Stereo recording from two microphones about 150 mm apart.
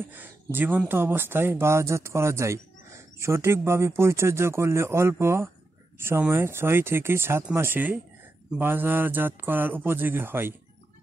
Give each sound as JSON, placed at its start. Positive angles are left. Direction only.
{"t": 0.0, "sound": "speech", "side_deg": -10}